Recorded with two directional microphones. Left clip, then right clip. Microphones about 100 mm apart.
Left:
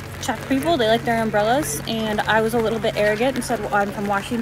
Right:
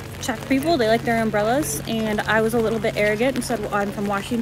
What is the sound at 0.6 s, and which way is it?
Speech, 5° left (ahead or behind).